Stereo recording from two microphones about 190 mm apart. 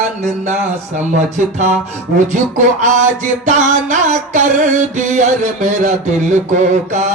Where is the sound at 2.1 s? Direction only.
40° right (ahead or behind).